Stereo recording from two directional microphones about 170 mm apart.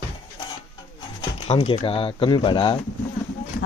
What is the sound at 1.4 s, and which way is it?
Speech, 35° left (ahead or behind).